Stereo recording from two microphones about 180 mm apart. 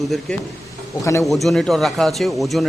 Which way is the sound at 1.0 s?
15° left (ahead or behind).